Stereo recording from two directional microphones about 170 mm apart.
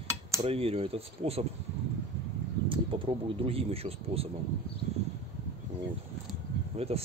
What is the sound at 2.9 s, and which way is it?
Speech, 30° right (ahead or behind).